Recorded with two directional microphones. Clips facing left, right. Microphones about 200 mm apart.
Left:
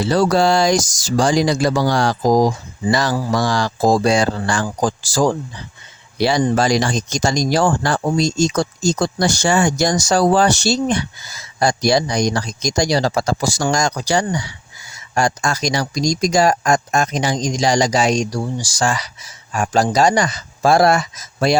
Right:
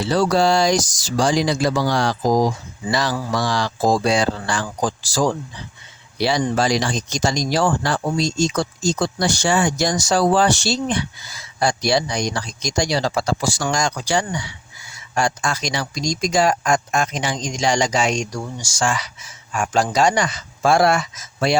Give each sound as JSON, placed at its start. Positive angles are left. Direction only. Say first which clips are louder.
{"t": 0.0, "sound": "speech", "louder": "left 2 dB", "side_deg": 45}